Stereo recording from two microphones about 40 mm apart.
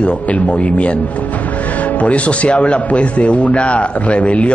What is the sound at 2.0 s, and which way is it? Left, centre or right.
A man's voice, left.